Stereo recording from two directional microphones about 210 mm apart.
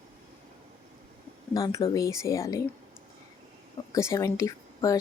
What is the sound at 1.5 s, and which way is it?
Speech, 15° left (ahead or behind).